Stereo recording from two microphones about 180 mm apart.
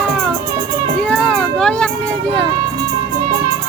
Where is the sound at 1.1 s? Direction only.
5° left (ahead or behind).